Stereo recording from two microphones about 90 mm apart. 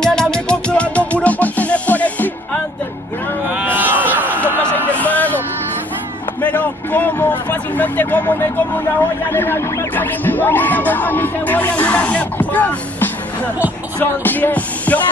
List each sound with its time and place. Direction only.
0.0 s music: 10° left (ahead or behind)
3.4 s a sound: 20° right (ahead or behind)
4.9 s a sound: 15° left (ahead or behind)
6.4 s vehicle: 20° left (ahead or behind)
9.3 s music: 25° left (ahead or behind)
14.2 s music: 20° left (ahead or behind)